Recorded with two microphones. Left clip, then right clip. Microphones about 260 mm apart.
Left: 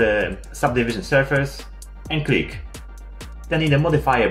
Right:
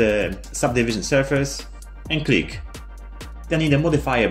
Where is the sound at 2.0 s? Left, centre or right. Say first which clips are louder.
Right 1 dB; centre.